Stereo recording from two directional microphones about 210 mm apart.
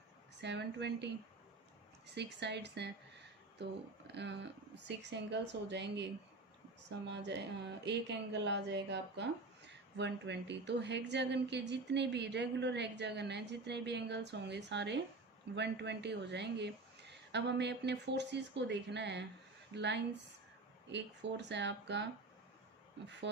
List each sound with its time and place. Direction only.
0.4 s speech: 55° right (ahead or behind)
2.1 s speech: 55° right (ahead or behind)
7.1 s speech: 55° right (ahead or behind)
23.2 s speech: 55° right (ahead or behind)